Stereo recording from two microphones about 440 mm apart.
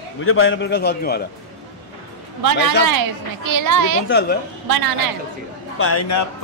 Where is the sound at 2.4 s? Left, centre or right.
Right.